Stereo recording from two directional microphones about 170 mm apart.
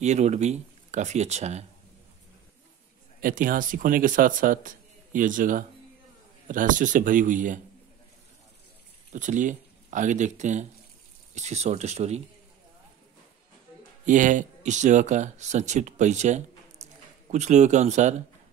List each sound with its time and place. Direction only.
0.0 s speech: 40° right (ahead or behind)
3.2 s speech: 55° right (ahead or behind)
9.1 s speech: 45° right (ahead or behind)
14.0 s speech: 50° right (ahead or behind)
16.8 s a sound: 40° right (ahead or behind)
17.3 s speech: 40° right (ahead or behind)